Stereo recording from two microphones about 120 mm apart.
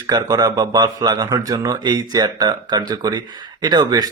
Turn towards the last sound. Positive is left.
turn(degrees=-35)  # may be behind; listen again after turning